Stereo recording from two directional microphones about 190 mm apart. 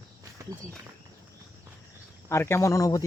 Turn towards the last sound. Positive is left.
turn(degrees=15)  # may be behind; listen again after turning